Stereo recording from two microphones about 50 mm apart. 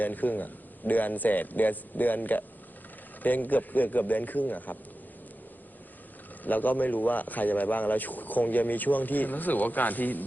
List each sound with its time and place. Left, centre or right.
0.0 s a man's voice: left
6.4 s a man's voice: left